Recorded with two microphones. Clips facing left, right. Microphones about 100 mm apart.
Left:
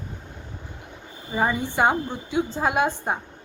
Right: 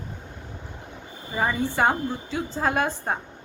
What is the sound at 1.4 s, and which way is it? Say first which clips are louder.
A woman's voice: left 1 dB; 15° left (ahead or behind).